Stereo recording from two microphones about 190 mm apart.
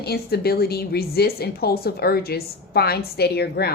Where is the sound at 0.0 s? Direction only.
55° left (ahead or behind).